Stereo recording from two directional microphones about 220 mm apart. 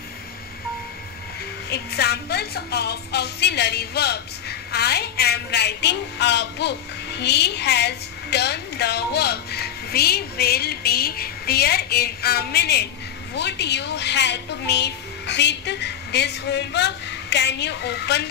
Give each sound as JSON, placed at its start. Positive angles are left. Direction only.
{"t": 1.7, "sound": "a woman's voice", "side_deg": 45}